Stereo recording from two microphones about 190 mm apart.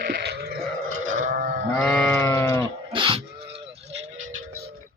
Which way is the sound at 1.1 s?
45° right (ahead or behind).